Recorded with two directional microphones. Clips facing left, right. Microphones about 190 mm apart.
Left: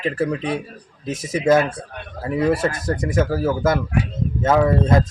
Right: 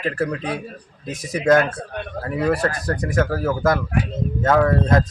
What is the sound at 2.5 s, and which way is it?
Speech, 25° left (ahead or behind).